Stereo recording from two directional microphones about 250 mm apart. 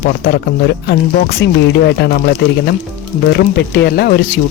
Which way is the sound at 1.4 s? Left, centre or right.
Left.